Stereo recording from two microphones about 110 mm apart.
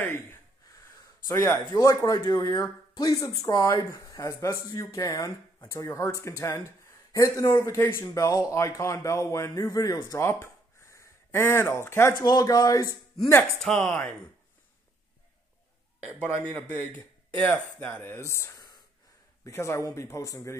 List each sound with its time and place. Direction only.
0.0 s gasp: 20° left (ahead or behind)
1.2 s a man's voice: 25° left (ahead or behind)
10.2 s a sound: 25° left (ahead or behind)
12.2 s speech: 35° left (ahead or behind)
13.4 s speech: 10° left (ahead or behind)
16.4 s a man's voice: 15° left (ahead or behind)